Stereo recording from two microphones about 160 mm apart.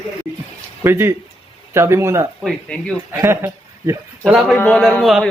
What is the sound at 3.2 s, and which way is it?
Speech, 20° right (ahead or behind).